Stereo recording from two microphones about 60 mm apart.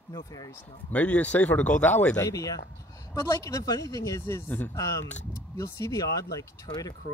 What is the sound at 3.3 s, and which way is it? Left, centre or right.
Speech, left.